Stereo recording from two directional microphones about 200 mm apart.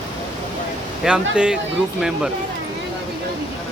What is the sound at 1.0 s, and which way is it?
Speech, 5° right (ahead or behind).